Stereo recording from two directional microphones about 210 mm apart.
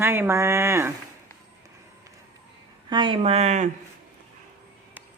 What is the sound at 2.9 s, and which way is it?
Speech, 25° right (ahead or behind).